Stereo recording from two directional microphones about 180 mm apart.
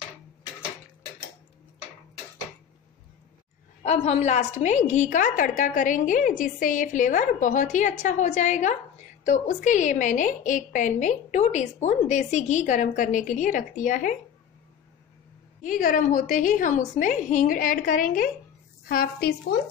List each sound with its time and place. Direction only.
3.8 s a woman's voice: 35° left (ahead or behind)
15.6 s a woman's voice: 50° left (ahead or behind)